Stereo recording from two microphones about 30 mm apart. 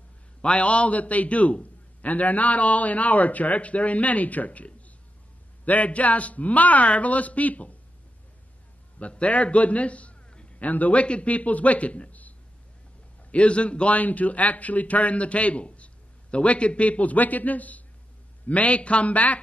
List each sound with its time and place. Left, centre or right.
0.4 s a man's voice: left
9.0 s a man's voice: left
10.6 s a man's voice: left
12.1 s a sound: left
13.3 s a man's voice: left
13.9 s a man's voice: left